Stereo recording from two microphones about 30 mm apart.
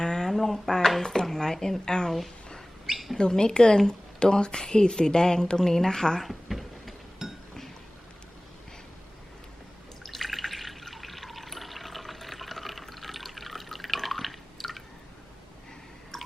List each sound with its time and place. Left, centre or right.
0.0 s a sound: left
0.3 s a sound: centre
1.6 s a woman's voice: left
2.9 s bird: centre
3.2 s a woman's voice: left
6.2 s a sound: centre
7.2 s chink: centre
10.0 s drip: centre
16.1 s drip: centre